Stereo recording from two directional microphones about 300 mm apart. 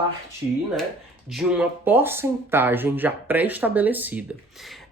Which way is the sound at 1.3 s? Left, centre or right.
Centre.